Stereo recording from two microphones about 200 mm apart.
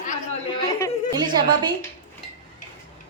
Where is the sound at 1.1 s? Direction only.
20° right (ahead or behind).